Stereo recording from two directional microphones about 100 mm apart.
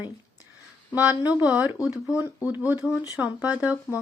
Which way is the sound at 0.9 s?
35° left (ahead or behind).